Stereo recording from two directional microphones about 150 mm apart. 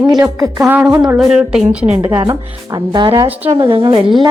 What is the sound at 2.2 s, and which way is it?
Speech, 30° right (ahead or behind).